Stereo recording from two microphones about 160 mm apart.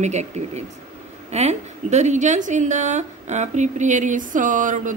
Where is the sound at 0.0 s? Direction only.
45° right (ahead or behind).